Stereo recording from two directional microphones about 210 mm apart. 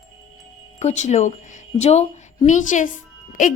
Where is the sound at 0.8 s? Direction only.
35° left (ahead or behind).